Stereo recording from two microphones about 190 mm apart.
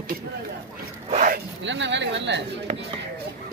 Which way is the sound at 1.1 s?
45° right (ahead or behind).